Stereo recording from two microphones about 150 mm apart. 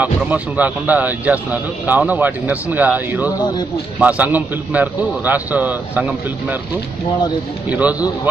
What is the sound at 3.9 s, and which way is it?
A man's voice, 10° right (ahead or behind).